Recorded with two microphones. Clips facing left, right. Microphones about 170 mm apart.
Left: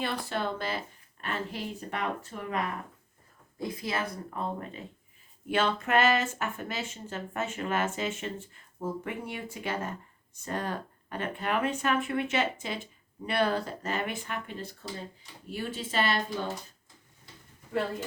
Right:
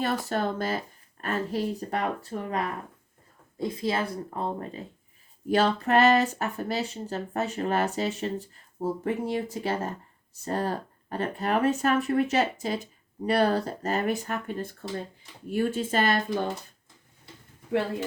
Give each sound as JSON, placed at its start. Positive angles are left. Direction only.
{"t": 0.0, "sound": "speech", "side_deg": -45}
{"t": 3.6, "sound": "speech", "side_deg": -25}